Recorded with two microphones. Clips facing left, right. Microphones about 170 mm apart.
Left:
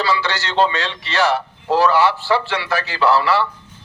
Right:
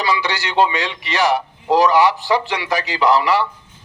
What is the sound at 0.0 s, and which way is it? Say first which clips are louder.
A man's voice: even; 15° right (ahead or behind).